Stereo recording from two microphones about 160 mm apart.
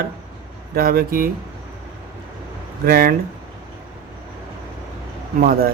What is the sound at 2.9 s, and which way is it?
Speech, 70° right (ahead or behind).